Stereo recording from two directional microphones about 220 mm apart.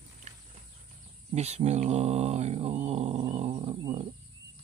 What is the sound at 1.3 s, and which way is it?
Mantra, 30° right (ahead or behind).